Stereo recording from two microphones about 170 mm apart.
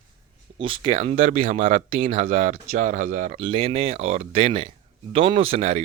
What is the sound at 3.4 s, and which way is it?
Speech, 30° right (ahead or behind).